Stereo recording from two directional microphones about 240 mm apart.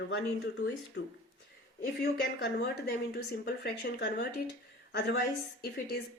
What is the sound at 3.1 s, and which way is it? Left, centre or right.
A woman's voice, left.